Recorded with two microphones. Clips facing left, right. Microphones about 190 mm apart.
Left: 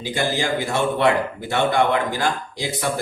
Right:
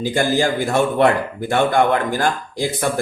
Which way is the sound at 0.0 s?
50° right (ahead or behind).